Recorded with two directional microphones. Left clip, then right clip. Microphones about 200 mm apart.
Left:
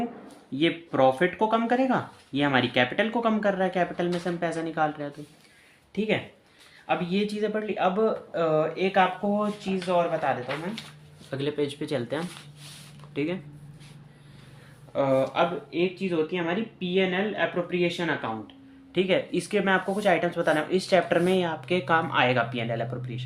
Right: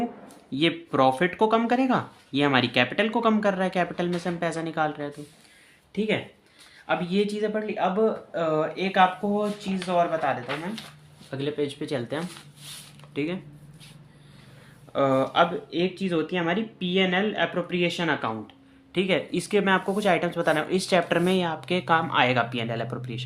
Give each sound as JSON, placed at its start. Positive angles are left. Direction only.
{"t": 0.5, "sound": "speech", "side_deg": -20}
{"t": 5.9, "sound": "speech", "side_deg": -5}
{"t": 14.9, "sound": "speech", "side_deg": -20}